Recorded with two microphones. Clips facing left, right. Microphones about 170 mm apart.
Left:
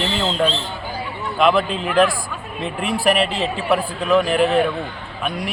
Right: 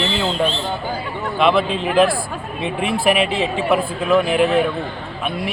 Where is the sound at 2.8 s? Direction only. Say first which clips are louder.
Even; 40° left (ahead or behind).